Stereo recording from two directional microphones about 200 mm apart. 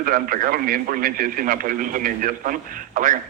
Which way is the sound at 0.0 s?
45° right (ahead or behind).